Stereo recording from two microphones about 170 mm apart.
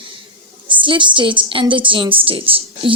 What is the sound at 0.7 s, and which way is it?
A woman's voice, 30° right (ahead or behind).